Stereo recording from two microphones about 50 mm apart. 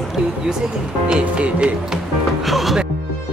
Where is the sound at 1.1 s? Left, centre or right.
Right.